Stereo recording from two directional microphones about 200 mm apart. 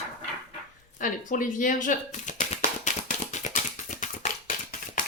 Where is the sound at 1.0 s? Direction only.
40° left (ahead or behind).